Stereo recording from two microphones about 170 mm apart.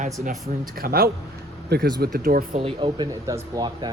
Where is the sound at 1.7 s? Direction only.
70° right (ahead or behind).